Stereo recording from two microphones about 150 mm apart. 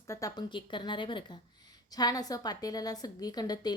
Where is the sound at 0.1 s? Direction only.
25° left (ahead or behind).